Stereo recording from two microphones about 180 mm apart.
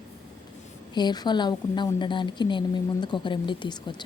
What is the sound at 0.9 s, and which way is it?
A woman's voice, 25° left (ahead or behind).